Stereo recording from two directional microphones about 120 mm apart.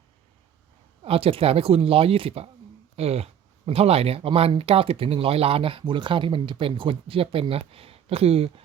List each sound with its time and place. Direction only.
1.0 s speech: 50° right (ahead or behind)